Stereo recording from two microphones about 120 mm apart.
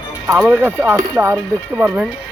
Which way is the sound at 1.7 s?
10° right (ahead or behind).